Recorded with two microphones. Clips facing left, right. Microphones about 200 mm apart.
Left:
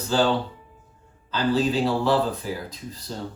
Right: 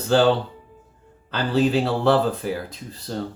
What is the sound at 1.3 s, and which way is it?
Speech, 65° right (ahead or behind).